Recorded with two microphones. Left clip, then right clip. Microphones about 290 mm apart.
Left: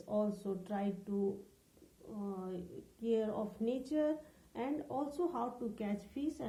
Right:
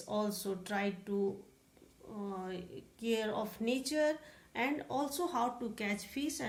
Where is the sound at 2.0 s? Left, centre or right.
Right.